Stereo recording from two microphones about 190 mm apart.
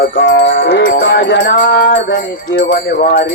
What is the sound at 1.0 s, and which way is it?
Music, 70° left (ahead or behind).